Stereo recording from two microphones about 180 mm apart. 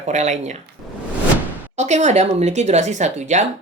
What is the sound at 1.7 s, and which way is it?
Speech, 40° right (ahead or behind).